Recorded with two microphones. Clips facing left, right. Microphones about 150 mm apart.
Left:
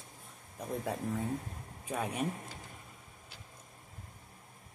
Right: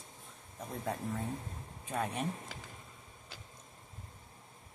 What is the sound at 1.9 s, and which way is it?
Speech, 5° left (ahead or behind).